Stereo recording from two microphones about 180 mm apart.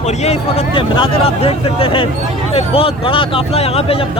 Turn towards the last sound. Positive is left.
turn(degrees=35)  # may be behind; listen again after turning